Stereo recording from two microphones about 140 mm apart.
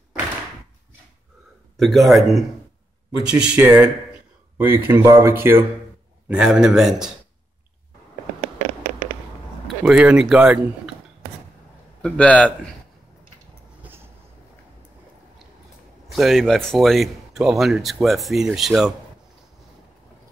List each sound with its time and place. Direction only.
1.8 s speech: centre (ahead or behind)
9.7 s speech: 5° right (ahead or behind)
12.0 s a man's voice: 10° left (ahead or behind)
13.8 s vehicle: 15° right (ahead or behind)
16.1 s speech: centre (ahead or behind)